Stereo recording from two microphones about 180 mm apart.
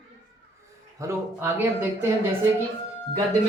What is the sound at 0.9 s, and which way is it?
Speech, 15° right (ahead or behind).